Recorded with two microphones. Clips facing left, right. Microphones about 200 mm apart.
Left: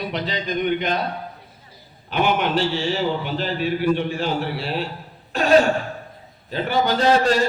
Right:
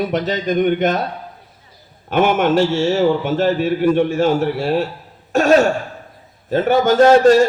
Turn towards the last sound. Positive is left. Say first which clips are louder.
# right 8 dB
turn(degrees=-45)  # may be behind; listen again after turning